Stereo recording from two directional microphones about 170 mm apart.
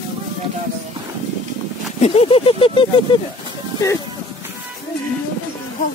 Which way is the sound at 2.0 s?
35° left (ahead or behind).